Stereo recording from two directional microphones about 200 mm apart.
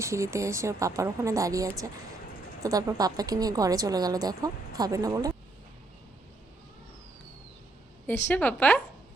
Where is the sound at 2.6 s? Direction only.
15° right (ahead or behind).